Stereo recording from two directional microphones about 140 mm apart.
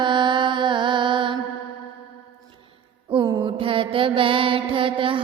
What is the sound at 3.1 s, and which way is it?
Music, 30° right (ahead or behind).